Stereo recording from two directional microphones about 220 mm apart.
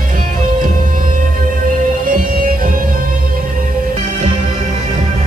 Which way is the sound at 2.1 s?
40° right (ahead or behind).